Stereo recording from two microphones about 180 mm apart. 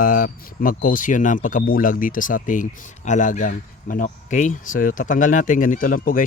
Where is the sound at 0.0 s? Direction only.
50° left (ahead or behind).